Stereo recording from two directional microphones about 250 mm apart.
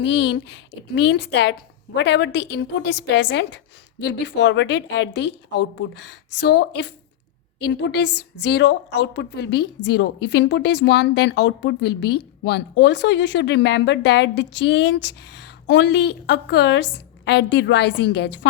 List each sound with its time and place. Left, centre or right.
0.0 s speech: left